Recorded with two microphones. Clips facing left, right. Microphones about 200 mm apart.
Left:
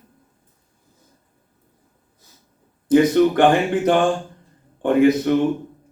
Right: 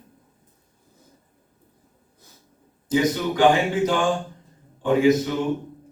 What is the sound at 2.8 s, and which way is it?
Speech, 60° left (ahead or behind).